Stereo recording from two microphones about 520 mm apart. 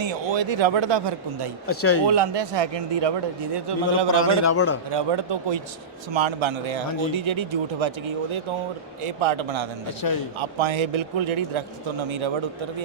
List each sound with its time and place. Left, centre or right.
0.0 s speech: right
1.6 s speech: left
2.0 s a man's voice: right
4.4 s speech: left
4.9 s a man's voice: right
10.0 s a man's voice: left
10.4 s speech: right